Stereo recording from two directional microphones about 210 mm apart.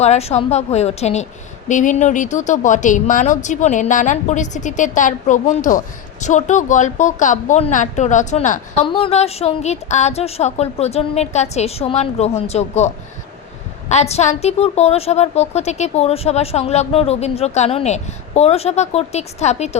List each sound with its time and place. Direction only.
0.0 s a woman's voice: 30° left (ahead or behind)